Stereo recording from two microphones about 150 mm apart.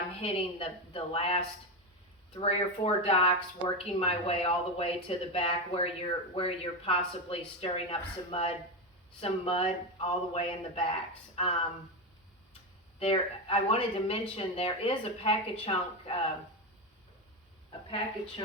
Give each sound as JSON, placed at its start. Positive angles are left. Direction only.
{"t": 0.2, "sound": "speech", "side_deg": 40}
{"t": 2.4, "sound": "speech", "side_deg": 40}
{"t": 13.0, "sound": "speech", "side_deg": 40}
{"t": 17.7, "sound": "a woman's voice", "side_deg": 35}